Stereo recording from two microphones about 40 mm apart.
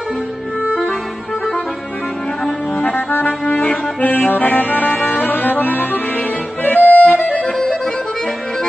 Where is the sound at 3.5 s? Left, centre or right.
Left.